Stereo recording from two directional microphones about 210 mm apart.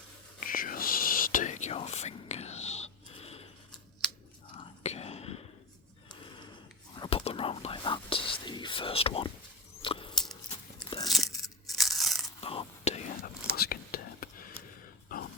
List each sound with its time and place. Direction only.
0.3 s whispering: 40° left (ahead or behind)
7.0 s whispering: 25° left (ahead or behind)
9.8 s a sound: 25° left (ahead or behind)
10.5 s biting: 20° left (ahead or behind)
11.8 s crunch: centre (ahead or behind)
12.4 s whispering: 25° left (ahead or behind)
13.6 s whispering: 45° left (ahead or behind)